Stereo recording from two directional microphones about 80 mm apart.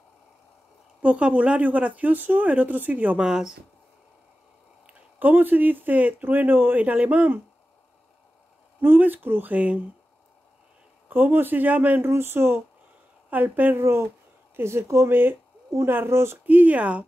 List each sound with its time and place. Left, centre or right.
1.0 s speech: centre
3.3 s speech: centre
4.8 s speech: right
8.8 s speech: right
11.1 s speech: right
16.4 s speech: centre